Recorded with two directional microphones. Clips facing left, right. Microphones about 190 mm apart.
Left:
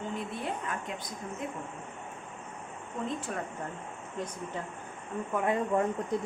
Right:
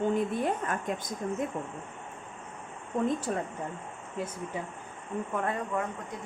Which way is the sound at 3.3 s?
35° right (ahead or behind).